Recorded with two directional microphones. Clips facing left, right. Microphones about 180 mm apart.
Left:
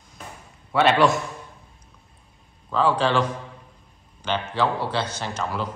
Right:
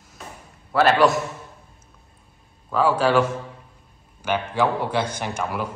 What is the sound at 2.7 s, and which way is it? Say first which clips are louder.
Speech: right 2 dB; 10° right (ahead or behind).